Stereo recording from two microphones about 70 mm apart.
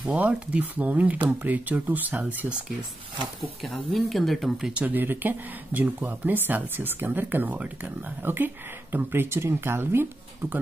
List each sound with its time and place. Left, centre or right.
0.0 s speech: right
3.3 s speech: centre
4.7 s speech: right